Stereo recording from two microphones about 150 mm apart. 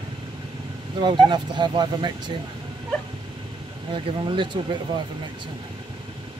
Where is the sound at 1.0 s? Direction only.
30° right (ahead or behind).